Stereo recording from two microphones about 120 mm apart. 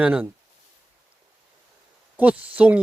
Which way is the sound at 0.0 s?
15° right (ahead or behind).